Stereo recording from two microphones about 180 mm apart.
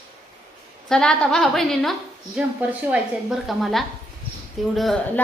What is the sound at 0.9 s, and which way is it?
A woman's voice, 5° left (ahead or behind).